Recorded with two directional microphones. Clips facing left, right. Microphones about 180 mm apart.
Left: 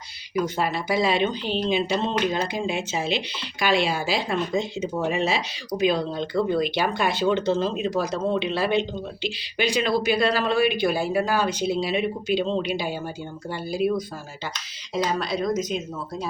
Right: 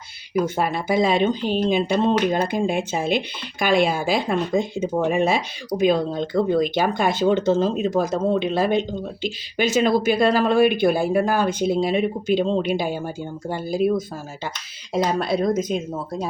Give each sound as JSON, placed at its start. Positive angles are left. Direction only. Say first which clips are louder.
{"t": 0.4, "sound": "speech", "louder": "right 3 dB", "side_deg": -50}
{"t": 14.9, "sound": "speech", "louder": "right 4 dB", "side_deg": -55}
{"t": 15.7, "sound": "speech", "louder": "right 4 dB", "side_deg": -45}